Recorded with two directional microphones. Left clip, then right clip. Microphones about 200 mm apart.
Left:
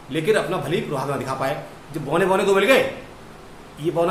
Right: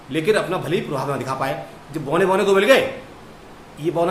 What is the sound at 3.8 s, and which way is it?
Speech, 15° right (ahead or behind).